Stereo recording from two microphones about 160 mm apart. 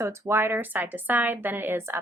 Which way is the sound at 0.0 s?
15° right (ahead or behind).